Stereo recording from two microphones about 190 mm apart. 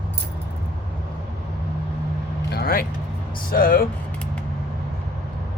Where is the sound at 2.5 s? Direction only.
55° left (ahead or behind).